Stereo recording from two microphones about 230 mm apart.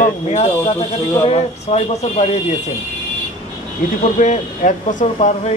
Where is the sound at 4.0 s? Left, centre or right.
Left.